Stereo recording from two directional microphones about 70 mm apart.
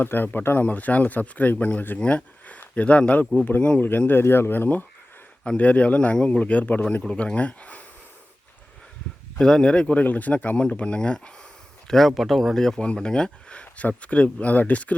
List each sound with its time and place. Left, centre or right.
0.0 s speech: left
2.0 s a sound: centre
2.6 s speech: centre
9.4 s speech: centre
11.9 s speech: centre